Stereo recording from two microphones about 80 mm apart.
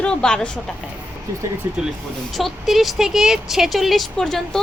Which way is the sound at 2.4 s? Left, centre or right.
Centre.